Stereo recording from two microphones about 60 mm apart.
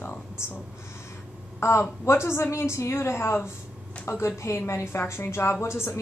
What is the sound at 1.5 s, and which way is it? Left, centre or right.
Speech, left.